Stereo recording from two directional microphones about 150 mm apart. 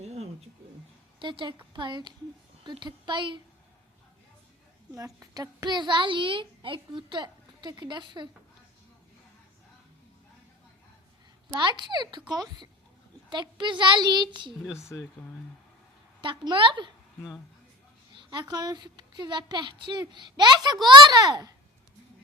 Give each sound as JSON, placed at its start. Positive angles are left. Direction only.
{"t": 0.0, "sound": "a sound", "side_deg": -45}
{"t": 1.2, "sound": "a child's voice", "side_deg": -30}
{"t": 4.9, "sound": "a child's voice", "side_deg": -25}
{"t": 11.5, "sound": "a woman's voice", "side_deg": -30}
{"t": 14.8, "sound": "speech", "side_deg": 20}
{"t": 16.2, "sound": "a child's voice", "side_deg": -30}
{"t": 18.2, "sound": "a woman's voice", "side_deg": -30}